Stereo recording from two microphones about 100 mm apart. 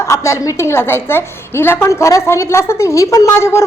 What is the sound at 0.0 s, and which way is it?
A woman's voice, 30° left (ahead or behind).